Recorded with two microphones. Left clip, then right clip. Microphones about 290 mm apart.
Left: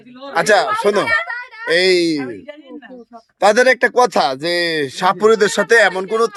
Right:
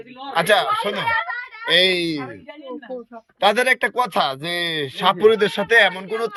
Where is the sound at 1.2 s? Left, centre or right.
Centre.